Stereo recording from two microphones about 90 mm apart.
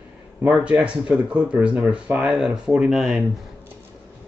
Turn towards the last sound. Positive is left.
turn(degrees=-5)  # may be behind; listen again after turning